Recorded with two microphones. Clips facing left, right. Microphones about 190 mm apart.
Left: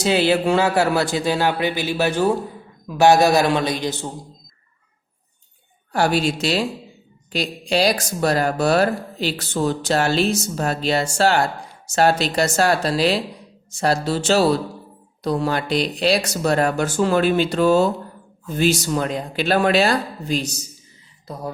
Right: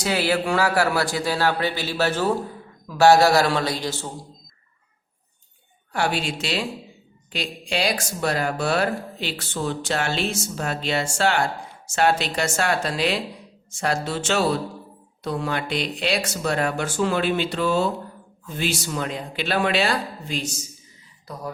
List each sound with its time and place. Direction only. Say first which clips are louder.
0.0 s a man's voice: left 5 dB; 25° left (ahead or behind)
5.9 s speech: left 5 dB; 40° left (ahead or behind)